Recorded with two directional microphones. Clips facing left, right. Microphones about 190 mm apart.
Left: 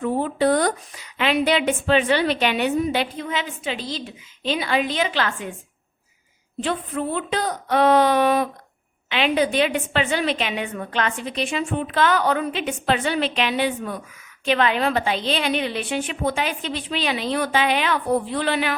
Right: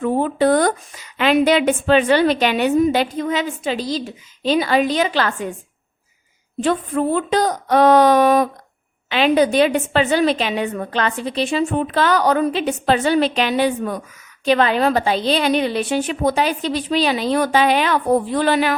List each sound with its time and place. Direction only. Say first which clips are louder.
0.0 s a woman's voice: right 4 dB; 50° right (ahead or behind)
6.6 s a woman's voice: right 6 dB; 45° right (ahead or behind)